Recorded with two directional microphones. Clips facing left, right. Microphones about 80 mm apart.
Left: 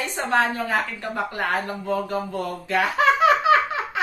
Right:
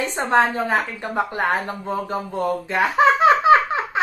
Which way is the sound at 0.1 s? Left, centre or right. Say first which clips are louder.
Right 3 dB; right.